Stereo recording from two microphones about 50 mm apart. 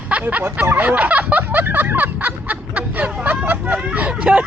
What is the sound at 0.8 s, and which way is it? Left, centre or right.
Snicker, right.